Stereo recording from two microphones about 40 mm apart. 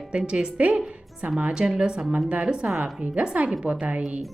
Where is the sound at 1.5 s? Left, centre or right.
Right.